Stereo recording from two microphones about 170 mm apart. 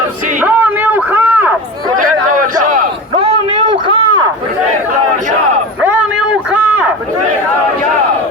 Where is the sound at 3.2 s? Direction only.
30° right (ahead or behind).